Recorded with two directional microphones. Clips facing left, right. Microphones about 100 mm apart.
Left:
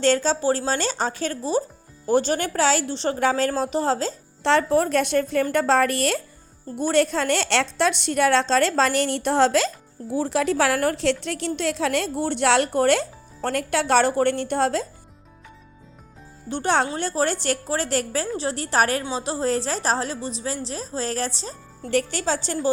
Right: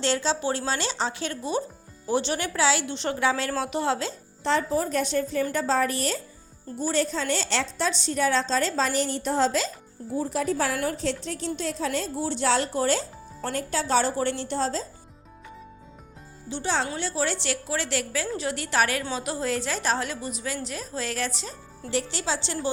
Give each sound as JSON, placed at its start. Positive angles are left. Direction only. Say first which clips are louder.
{"t": 0.0, "sound": "a woman's voice", "louder": "left 5 dB", "side_deg": 45}
{"t": 4.4, "sound": "a woman's voice", "louder": "left 5 dB", "side_deg": 70}
{"t": 16.5, "sound": "a woman's voice", "louder": "left 6 dB", "side_deg": 55}
{"t": 21.8, "sound": "speech", "louder": "left 5 dB", "side_deg": 50}